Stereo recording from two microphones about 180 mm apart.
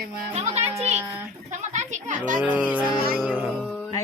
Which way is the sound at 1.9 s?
45° right (ahead or behind).